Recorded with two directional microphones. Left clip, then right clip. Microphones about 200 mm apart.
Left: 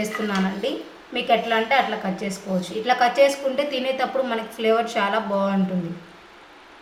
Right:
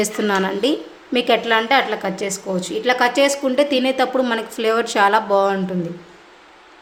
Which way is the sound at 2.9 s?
60° right (ahead or behind).